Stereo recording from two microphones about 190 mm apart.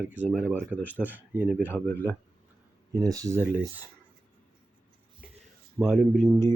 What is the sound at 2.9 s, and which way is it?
Speech, 20° right (ahead or behind).